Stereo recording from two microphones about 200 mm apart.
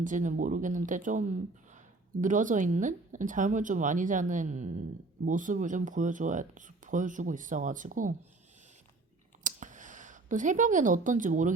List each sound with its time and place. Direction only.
0.0 s speech: 40° right (ahead or behind)
2.2 s speech: 40° right (ahead or behind)
9.4 s a sound: 40° right (ahead or behind)